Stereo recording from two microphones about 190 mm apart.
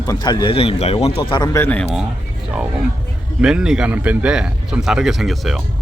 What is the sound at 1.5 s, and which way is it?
Speech, 10° left (ahead or behind).